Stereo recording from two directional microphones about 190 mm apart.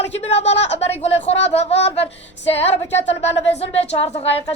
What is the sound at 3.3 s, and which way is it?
Speech, 35° left (ahead or behind).